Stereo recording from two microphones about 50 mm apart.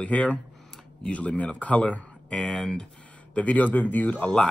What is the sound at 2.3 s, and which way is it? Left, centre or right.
Speech, centre.